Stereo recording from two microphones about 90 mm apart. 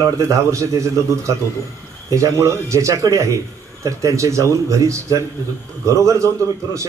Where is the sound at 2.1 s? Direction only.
35° right (ahead or behind).